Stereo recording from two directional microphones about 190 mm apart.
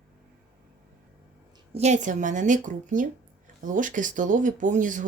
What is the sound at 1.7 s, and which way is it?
Speech, 35° right (ahead or behind).